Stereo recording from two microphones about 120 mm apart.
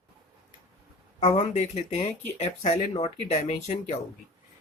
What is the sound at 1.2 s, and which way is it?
Speech, 70° left (ahead or behind).